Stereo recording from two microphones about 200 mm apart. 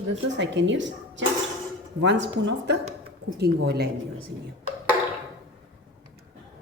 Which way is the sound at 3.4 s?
55° right (ahead or behind).